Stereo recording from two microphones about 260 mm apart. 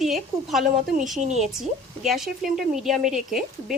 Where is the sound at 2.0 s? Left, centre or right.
Centre.